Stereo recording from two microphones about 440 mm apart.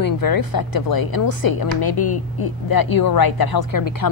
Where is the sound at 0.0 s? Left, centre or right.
Left.